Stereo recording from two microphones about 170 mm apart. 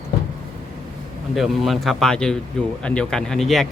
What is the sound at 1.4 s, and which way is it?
A man's voice, centre (ahead or behind).